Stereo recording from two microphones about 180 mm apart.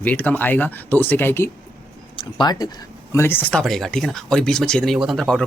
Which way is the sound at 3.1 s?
10° left (ahead or behind).